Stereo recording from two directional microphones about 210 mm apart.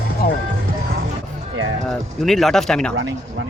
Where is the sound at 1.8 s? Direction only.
Centre (ahead or behind).